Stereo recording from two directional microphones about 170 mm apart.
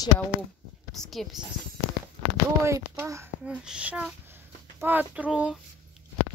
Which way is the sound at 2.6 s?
15° right (ahead or behind).